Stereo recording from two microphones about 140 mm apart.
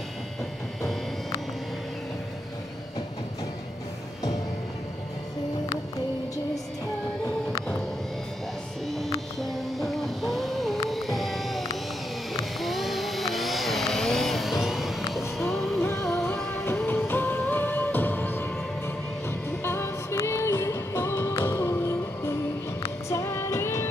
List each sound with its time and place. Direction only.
8.8 s music: centre (ahead or behind)
9.4 s a sound: centre (ahead or behind)
10.9 s music: centre (ahead or behind)
12.5 s vehicle: centre (ahead or behind)
15.5 s music: centre (ahead or behind)
16.4 s music: 15° left (ahead or behind)
19.6 s music: 20° left (ahead or behind)